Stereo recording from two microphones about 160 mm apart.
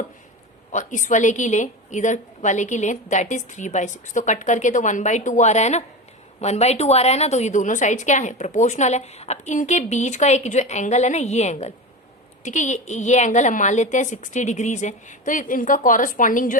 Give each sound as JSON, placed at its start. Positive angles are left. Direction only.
{"t": 0.7, "sound": "a woman's voice", "side_deg": 50}